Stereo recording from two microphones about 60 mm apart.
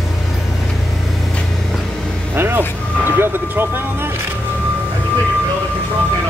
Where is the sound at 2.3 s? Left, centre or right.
Right.